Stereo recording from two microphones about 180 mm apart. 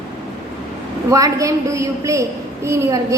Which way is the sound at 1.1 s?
20° right (ahead or behind).